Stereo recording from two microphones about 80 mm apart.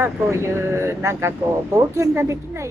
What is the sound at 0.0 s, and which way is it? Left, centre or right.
Speech, right.